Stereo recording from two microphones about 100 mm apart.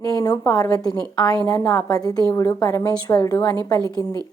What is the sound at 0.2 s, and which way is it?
A woman's voice, 40° left (ahead or behind).